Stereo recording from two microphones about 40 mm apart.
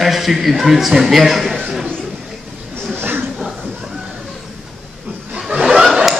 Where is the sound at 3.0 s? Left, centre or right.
Right.